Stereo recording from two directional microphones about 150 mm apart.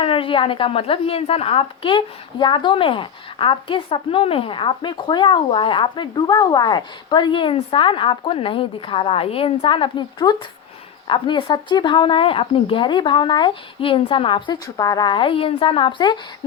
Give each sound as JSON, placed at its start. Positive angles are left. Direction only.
{"t": 0.0, "sound": "a woman's voice", "side_deg": 35}